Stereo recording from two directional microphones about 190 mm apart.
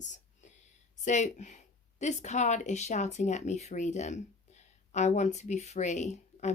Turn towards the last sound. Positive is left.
turn(degrees=35)  # may be behind; listen again after turning